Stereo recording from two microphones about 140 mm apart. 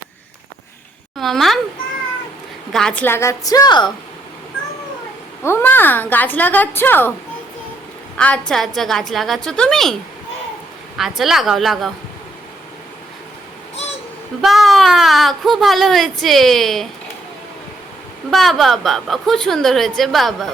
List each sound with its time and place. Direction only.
1.2 s speech: centre (ahead or behind)
2.7 s a woman's voice: 5° left (ahead or behind); by 3.9 s 30° left (ahead or behind)
5.4 s a woman's voice: 15° left (ahead or behind)
8.1 s speech: 10° left (ahead or behind)
10.9 s speech: centre (ahead or behind)
14.4 s speech: centre (ahead or behind)
18.3 s speech: centre (ahead or behind)